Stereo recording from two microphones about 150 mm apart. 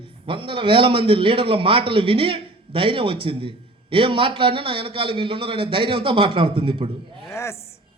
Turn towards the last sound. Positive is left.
turn(degrees=15)  # may be behind; listen again after turning